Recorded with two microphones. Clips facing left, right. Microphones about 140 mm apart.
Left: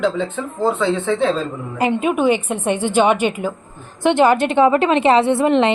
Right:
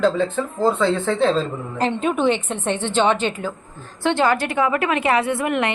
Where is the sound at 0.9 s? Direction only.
Centre (ahead or behind); by 5.7 s 25° left (ahead or behind).